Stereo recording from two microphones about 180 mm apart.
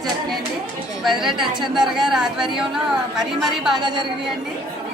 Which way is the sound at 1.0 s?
Centre (ahead or behind).